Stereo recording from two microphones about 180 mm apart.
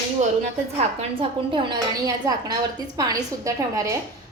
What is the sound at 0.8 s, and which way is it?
A woman's voice, 30° right (ahead or behind).